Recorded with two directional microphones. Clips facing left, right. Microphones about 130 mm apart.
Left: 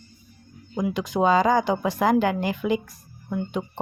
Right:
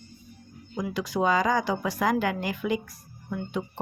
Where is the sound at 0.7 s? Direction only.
20° left (ahead or behind).